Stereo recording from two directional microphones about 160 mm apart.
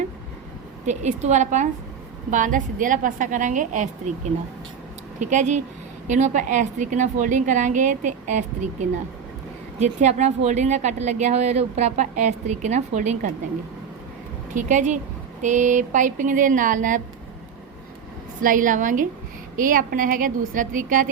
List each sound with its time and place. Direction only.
0.9 s a woman's voice: 45° right (ahead or behind)
5.3 s a woman's voice: 50° right (ahead or behind)
14.5 s a woman's voice: 50° right (ahead or behind)
18.3 s a woman's voice: 55° right (ahead or behind)